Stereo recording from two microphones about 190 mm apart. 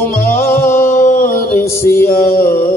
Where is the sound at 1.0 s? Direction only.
45° left (ahead or behind).